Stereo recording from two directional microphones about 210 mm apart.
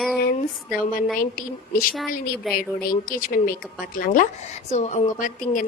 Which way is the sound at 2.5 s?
Centre (ahead or behind).